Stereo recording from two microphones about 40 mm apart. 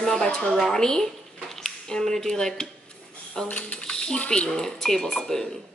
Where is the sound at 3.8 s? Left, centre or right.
Left.